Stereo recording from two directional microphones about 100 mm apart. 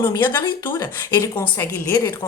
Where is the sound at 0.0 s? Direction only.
25° left (ahead or behind).